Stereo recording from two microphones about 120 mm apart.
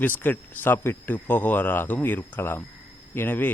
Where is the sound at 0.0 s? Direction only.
15° left (ahead or behind).